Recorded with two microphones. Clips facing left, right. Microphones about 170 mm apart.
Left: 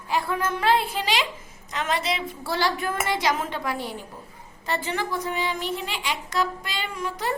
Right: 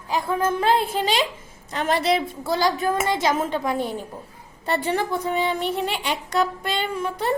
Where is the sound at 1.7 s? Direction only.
35° right (ahead or behind).